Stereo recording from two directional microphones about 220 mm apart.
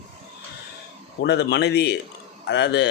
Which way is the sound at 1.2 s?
50° left (ahead or behind).